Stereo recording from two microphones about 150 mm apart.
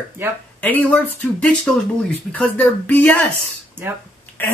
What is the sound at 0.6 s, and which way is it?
Speech, 10° left (ahead or behind).